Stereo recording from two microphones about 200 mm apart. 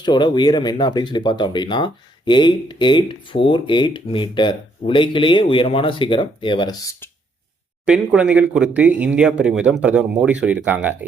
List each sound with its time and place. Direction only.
0.0 s speech: 20° left (ahead or behind)
7.9 s speech: 5° right (ahead or behind)